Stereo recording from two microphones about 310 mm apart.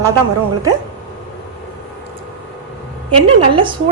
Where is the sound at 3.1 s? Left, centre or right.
Centre.